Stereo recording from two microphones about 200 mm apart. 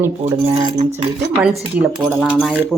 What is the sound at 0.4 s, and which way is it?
Speech, 30° right (ahead or behind).